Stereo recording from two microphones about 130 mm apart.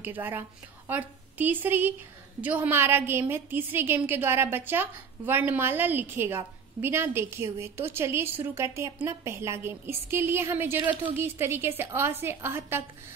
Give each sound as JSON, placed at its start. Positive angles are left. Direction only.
{"t": 0.0, "sound": "a woman's voice", "side_deg": -15}